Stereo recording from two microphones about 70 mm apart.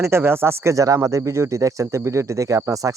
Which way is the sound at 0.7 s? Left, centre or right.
Right.